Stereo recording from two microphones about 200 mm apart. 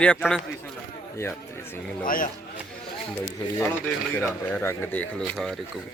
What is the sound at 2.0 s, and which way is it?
Speech, 45° left (ahead or behind).